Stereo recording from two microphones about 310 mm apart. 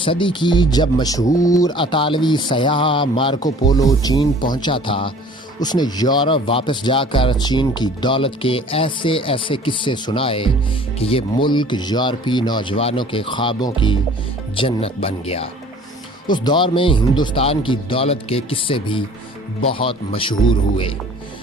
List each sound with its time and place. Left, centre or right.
0.0 s speech: centre